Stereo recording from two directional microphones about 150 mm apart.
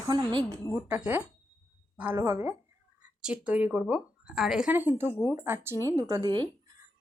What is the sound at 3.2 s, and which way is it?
Speech, 5° right (ahead or behind).